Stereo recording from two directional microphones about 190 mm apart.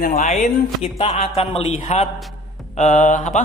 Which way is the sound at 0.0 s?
40° left (ahead or behind).